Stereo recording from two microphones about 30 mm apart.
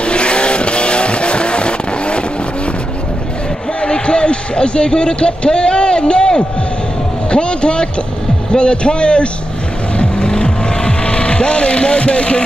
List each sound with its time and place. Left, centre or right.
0.0 s vehicle: left
3.8 s a sound: left
8.5 s a man's voice: left
9.9 s vehicle: left